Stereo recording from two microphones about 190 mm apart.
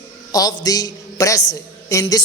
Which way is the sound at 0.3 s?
20° left (ahead or behind).